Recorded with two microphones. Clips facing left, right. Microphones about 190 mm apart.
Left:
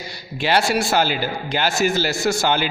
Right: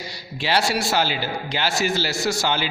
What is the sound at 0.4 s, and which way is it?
A man's voice, 55° left (ahead or behind).